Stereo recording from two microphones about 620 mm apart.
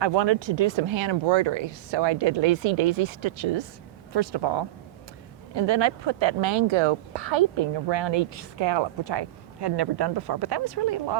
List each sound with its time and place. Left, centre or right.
0.0 s a woman's voice: right